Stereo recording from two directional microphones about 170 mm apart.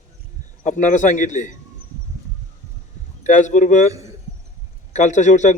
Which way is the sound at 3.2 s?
45° left (ahead or behind).